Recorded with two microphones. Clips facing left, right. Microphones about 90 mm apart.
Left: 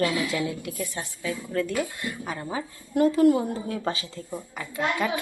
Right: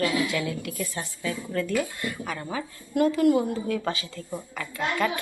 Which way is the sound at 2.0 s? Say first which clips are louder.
Right 1 dB; 20° left (ahead or behind).